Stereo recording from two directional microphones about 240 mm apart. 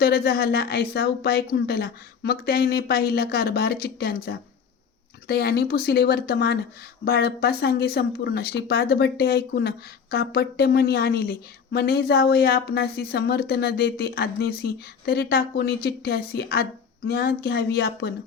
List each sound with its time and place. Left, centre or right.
0.0 s speech: left